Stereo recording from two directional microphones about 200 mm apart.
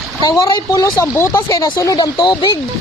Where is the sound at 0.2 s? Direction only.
20° left (ahead or behind).